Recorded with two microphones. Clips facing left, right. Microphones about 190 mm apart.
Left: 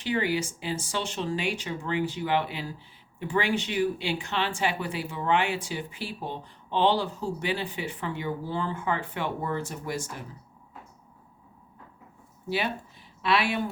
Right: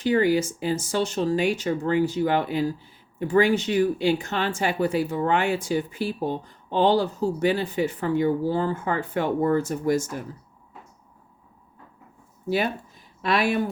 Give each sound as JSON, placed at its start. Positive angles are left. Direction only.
{"t": 0.0, "sound": "speech", "side_deg": -45}
{"t": 12.5, "sound": "speech", "side_deg": -45}